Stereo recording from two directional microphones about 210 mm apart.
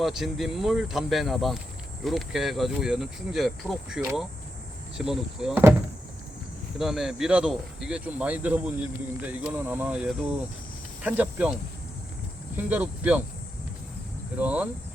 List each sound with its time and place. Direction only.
0.0 s speech: centre (ahead or behind)
6.7 s speech: centre (ahead or behind)
14.3 s speech: 5° right (ahead or behind)